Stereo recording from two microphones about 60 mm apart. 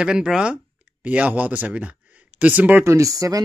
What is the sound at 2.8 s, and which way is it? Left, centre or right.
Speech, right.